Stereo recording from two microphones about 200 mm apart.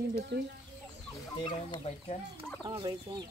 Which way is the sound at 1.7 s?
30° left (ahead or behind).